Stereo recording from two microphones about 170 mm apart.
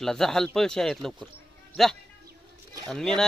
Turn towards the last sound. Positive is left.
turn(degrees=5)  # may be behind; listen again after turning